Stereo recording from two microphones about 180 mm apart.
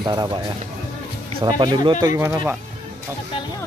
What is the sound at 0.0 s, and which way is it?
Speech, 25° right (ahead or behind).